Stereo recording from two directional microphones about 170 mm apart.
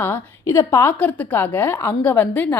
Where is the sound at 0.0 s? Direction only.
15° left (ahead or behind).